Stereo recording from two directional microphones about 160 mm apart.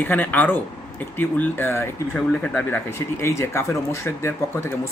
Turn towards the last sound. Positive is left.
turn(degrees=15)  # may be behind; listen again after turning